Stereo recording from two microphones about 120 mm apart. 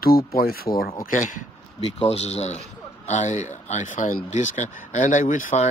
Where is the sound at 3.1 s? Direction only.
80° left.